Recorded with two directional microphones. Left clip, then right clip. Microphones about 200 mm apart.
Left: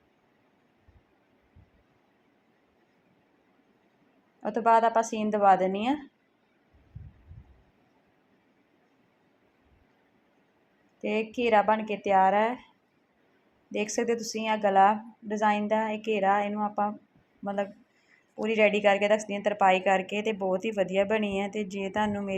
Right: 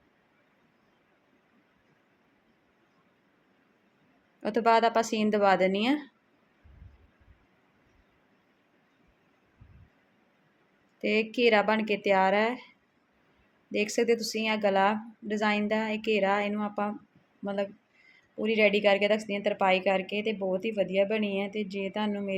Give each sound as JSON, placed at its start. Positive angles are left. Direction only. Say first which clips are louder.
{"t": 5.1, "sound": "speech", "louder": "left 2 dB", "side_deg": -10}
{"t": 11.0, "sound": "speech", "louder": "right 3 dB", "side_deg": -10}
{"t": 13.7, "sound": "speech", "louder": "right 2 dB", "side_deg": -15}